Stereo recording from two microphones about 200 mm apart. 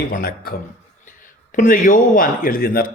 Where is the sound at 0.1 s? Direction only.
45° left (ahead or behind).